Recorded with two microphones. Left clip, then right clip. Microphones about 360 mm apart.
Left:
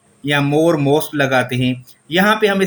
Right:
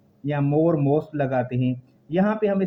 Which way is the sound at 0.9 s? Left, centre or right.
Right.